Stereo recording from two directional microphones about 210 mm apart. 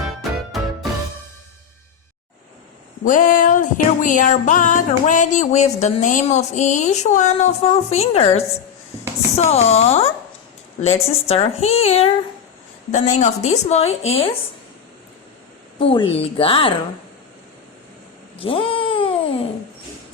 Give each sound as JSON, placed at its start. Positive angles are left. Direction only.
{"t": 0.0, "sound": "music", "side_deg": 0}
{"t": 3.0, "sound": "music", "side_deg": 40}
{"t": 10.8, "sound": "speech", "side_deg": 30}
{"t": 13.1, "sound": "music", "side_deg": 35}
{"t": 15.8, "sound": "speech", "side_deg": 25}
{"t": 18.3, "sound": "a sound", "side_deg": 25}